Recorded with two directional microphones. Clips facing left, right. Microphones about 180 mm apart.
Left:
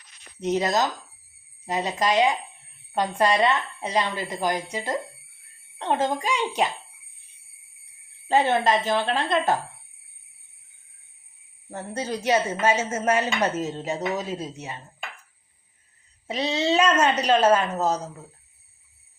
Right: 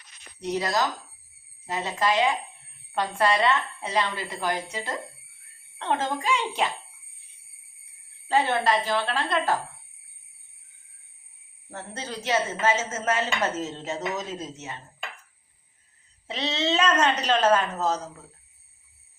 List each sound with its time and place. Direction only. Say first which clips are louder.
0.3 s a woman's voice: left 3 dB; 20° left (ahead or behind)
8.3 s speech: left 3 dB; 20° left (ahead or behind)
11.7 s a woman's voice: left 6 dB; 15° left (ahead or behind)
16.2 s a woman's voice: left 3 dB; 10° left (ahead or behind)